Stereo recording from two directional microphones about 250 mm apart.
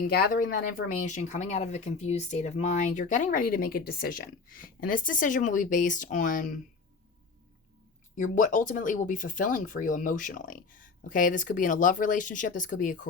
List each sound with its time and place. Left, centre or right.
0.0 s speech: left
8.1 s speech: left